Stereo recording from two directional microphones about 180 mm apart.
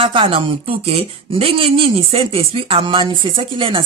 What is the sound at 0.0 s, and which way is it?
Speech, 30° right (ahead or behind).